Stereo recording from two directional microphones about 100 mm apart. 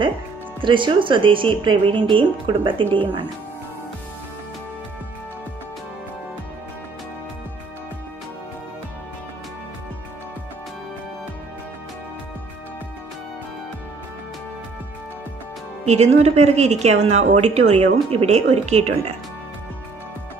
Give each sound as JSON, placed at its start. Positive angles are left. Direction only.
{"t": 0.6, "sound": "speech", "side_deg": -55}
{"t": 15.8, "sound": "speech", "side_deg": -90}